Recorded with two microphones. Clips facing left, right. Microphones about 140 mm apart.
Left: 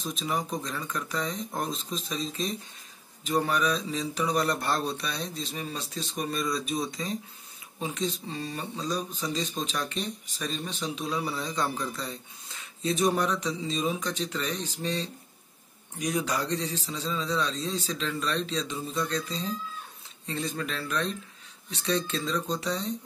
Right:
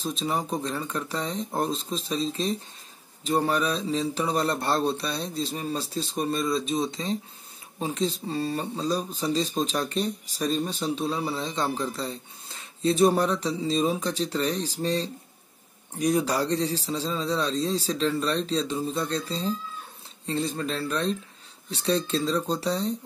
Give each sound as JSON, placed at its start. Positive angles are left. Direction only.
{"t": 0.0, "sound": "speech", "side_deg": -30}